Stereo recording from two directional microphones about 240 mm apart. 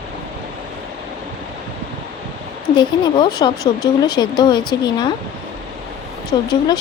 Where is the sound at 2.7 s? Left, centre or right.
Centre.